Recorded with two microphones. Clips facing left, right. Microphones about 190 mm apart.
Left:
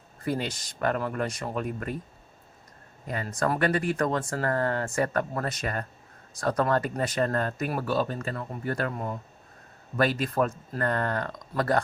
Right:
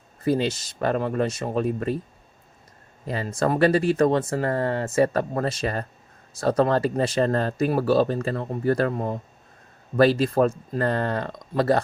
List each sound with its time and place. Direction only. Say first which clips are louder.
0.3 s speech: right 7 dB; 25° right (ahead or behind)
3.1 s speech: right 4 dB; 30° right (ahead or behind)